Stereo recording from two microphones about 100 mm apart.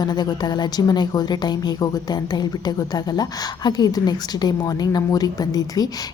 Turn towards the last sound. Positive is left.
turn(degrees=40)  # may be behind; listen again after turning